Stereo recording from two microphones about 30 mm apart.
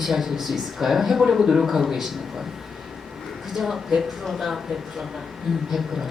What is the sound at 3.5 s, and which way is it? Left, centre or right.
Speech, centre.